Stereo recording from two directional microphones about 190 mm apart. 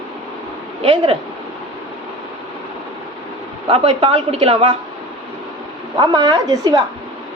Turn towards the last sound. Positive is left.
turn(degrees=-20)  # may be behind; listen again after turning